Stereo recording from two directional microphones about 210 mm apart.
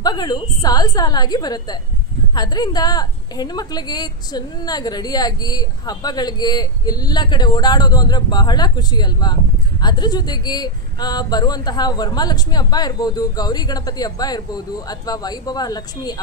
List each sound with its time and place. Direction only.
0.0 s a woman's voice: 20° left (ahead or behind)